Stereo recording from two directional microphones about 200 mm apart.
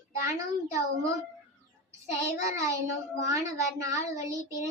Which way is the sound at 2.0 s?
15° right (ahead or behind).